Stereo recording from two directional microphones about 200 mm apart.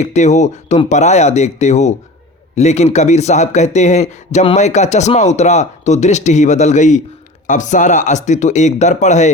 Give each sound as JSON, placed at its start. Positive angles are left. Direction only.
{"t": 0.0, "sound": "a man's voice", "side_deg": 35}